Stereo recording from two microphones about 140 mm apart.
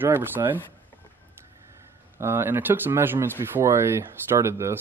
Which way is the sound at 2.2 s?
15° right (ahead or behind).